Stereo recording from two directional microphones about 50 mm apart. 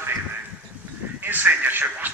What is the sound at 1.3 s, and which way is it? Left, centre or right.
Speech, right.